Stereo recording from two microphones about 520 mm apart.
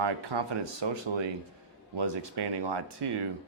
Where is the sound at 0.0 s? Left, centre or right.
Right.